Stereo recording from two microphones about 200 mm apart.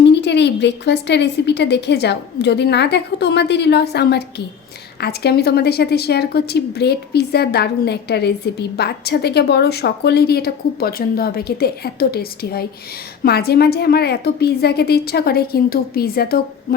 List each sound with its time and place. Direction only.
0.0 s a woman's voice: 60° left (ahead or behind)